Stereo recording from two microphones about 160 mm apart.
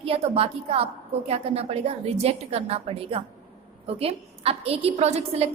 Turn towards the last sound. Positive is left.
turn(degrees=-40)  # may be behind; listen again after turning